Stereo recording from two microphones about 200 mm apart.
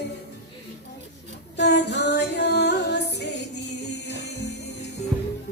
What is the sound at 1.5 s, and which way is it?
Music, 55° left (ahead or behind).